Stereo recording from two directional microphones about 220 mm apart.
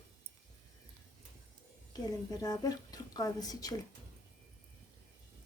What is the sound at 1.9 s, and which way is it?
A woman's voice, 15° left (ahead or behind).